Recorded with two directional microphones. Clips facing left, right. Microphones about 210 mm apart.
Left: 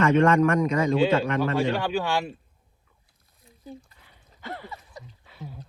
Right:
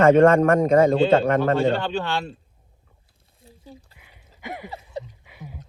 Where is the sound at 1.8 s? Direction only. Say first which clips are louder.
Even; 10° left (ahead or behind).